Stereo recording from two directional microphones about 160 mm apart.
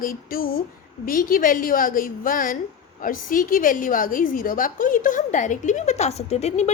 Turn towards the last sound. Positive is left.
turn(degrees=45)  # may be behind; listen again after turning